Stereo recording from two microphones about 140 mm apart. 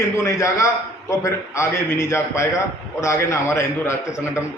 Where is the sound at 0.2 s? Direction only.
20° left (ahead or behind).